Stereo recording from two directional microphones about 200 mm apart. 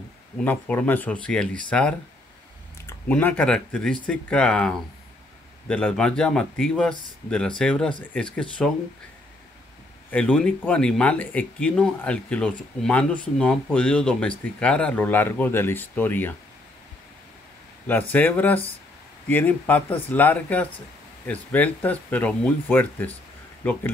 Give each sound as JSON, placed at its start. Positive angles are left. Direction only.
{"t": 0.4, "sound": "speech", "side_deg": 10}
{"t": 10.1, "sound": "speech", "side_deg": 5}
{"t": 17.8, "sound": "speech", "side_deg": 10}